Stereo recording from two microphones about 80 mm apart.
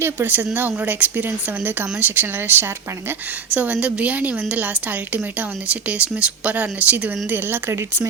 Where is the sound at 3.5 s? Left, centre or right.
Centre.